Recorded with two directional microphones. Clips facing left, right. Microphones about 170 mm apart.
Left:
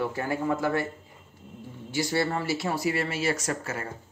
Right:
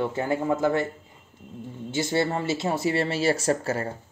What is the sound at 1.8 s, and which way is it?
Speech, 25° right (ahead or behind).